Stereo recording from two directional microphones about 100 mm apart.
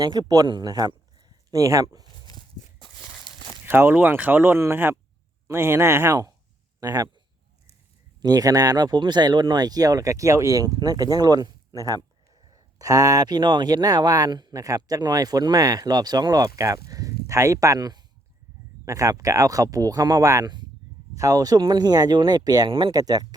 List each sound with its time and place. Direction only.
0.0 s a man's voice: 40° right (ahead or behind)
2.0 s a sound: 40° left (ahead or behind)
3.7 s speech: 20° right (ahead or behind)
6.7 s a man's voice: 35° right (ahead or behind)
8.2 s speech: 40° right (ahead or behind)
12.8 s speech: 35° right (ahead or behind)
20.4 s speech: 45° right (ahead or behind)